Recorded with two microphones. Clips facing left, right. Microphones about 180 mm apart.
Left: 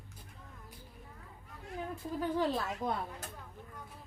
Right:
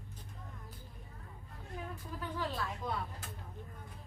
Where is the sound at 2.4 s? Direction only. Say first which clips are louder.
Left 3 dB; 40° left (ahead or behind).